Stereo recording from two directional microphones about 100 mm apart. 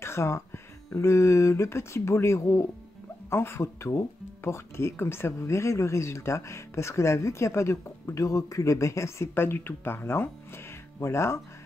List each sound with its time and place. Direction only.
0.0 s speech: 25° left (ahead or behind)